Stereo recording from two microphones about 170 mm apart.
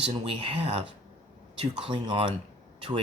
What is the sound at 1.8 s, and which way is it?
Speech, 30° right (ahead or behind).